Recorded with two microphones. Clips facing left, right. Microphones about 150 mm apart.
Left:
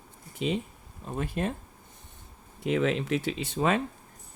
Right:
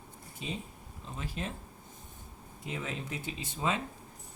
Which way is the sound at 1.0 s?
55° left (ahead or behind).